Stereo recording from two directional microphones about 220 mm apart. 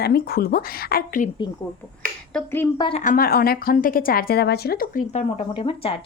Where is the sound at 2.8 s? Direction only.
30° left (ahead or behind).